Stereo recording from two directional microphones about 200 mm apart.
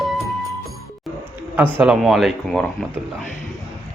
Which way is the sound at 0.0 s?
Centre (ahead or behind).